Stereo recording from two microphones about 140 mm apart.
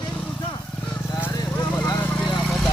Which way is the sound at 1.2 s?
25° left (ahead or behind).